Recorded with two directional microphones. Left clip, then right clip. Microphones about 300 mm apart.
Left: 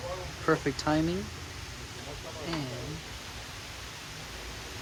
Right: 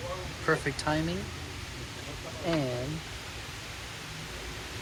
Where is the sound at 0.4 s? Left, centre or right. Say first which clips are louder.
Left 1 dB; centre.